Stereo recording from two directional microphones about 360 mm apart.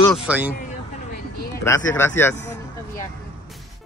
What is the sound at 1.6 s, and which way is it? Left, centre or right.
Speech, centre.